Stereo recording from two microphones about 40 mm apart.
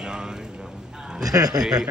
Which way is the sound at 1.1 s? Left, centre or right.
Centre.